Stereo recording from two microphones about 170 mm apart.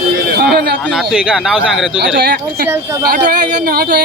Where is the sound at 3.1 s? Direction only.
60° right (ahead or behind).